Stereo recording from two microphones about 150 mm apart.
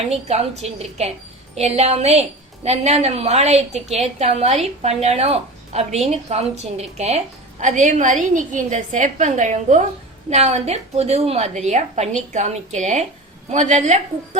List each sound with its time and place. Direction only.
0.1 s a woman's voice: 45° right (ahead or behind)